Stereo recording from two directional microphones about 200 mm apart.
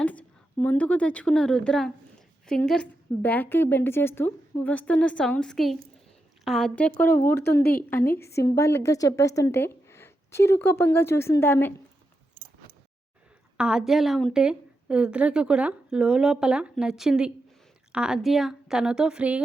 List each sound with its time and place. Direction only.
0.0 s a woman's voice: 5° left (ahead or behind)
7.6 s a woman's voice: 50° left (ahead or behind)
7.9 s a woman's voice: 10° left (ahead or behind)
13.6 s a woman's voice: 5° right (ahead or behind)